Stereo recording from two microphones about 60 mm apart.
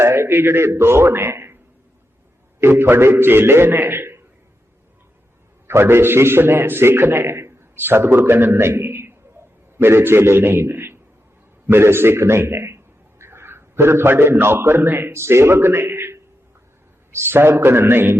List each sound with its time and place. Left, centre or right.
0.0 s a man's voice: right
2.6 s a man's voice: right
5.6 s a man's voice: right
7.8 s a man's voice: right